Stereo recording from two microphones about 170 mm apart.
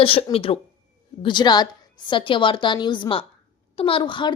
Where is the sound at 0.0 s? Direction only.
35° left (ahead or behind).